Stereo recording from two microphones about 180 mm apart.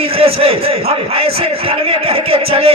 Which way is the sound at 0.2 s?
30° right (ahead or behind).